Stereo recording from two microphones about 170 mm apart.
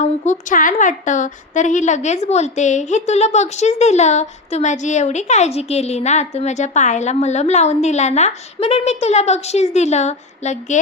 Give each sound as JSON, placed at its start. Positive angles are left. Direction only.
{"t": 0.0, "sound": "a woman's voice", "side_deg": 45}